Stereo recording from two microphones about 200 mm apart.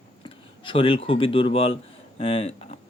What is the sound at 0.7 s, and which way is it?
Speech, 25° left (ahead or behind).